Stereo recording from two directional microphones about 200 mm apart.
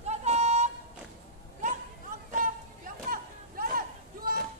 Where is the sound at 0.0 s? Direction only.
35° right (ahead or behind).